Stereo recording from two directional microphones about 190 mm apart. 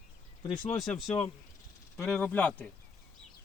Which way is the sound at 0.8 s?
Centre (ahead or behind).